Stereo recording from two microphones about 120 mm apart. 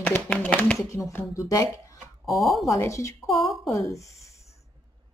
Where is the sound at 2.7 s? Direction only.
25° left (ahead or behind).